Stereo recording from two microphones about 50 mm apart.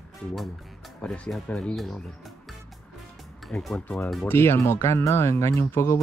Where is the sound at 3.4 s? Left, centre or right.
Centre.